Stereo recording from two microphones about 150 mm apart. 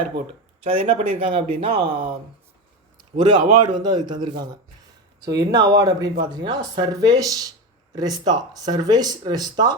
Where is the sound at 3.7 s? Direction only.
30° right (ahead or behind).